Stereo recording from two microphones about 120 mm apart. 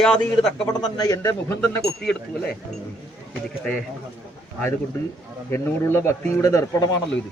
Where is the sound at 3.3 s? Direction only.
5° left (ahead or behind).